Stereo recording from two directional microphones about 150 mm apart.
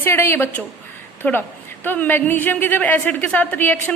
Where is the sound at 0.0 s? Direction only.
15° left (ahead or behind).